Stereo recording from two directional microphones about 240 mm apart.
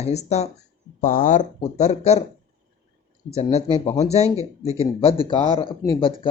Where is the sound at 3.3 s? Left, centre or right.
Left.